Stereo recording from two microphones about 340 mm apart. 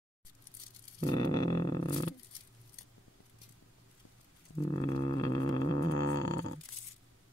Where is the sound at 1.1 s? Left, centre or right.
Centre.